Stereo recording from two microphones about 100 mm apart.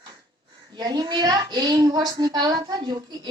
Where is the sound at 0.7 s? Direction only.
45° right (ahead or behind).